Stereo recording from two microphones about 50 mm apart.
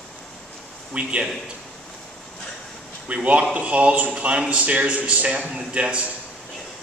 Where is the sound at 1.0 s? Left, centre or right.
Right.